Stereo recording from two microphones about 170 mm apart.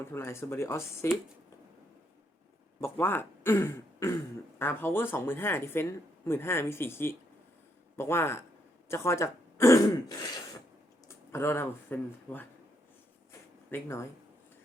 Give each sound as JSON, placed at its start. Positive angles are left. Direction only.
{"t": 0.0, "sound": "speech", "side_deg": 15}
{"t": 2.8, "sound": "speech", "side_deg": 10}
{"t": 11.3, "sound": "speech", "side_deg": 15}
{"t": 13.7, "sound": "speech", "side_deg": 15}